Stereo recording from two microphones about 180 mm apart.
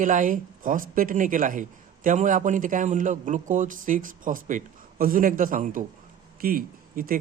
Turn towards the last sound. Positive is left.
turn(degrees=-55)  # may be behind; listen again after turning